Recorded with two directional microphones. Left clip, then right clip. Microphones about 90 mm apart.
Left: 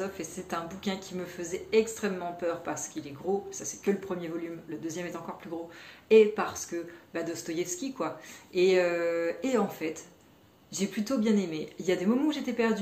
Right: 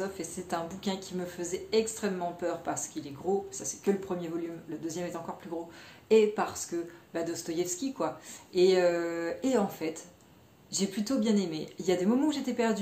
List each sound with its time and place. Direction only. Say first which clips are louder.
0.0 s a woman's voice: even; 35° right (ahead or behind)